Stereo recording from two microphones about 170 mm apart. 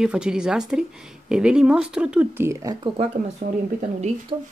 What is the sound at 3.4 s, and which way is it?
Speech, 55° right (ahead or behind).